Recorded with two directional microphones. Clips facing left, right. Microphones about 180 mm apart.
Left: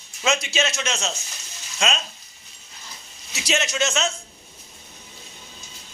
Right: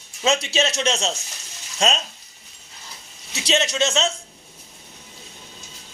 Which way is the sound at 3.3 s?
30° right (ahead or behind).